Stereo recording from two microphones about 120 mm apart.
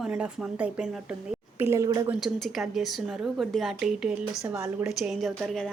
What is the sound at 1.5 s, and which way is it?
Speech, 20° right (ahead or behind).